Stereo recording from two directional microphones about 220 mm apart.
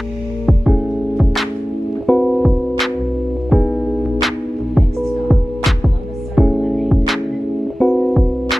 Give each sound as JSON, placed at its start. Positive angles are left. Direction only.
{"t": 0.5, "sound": "music", "side_deg": 0}
{"t": 6.3, "sound": "music", "side_deg": 0}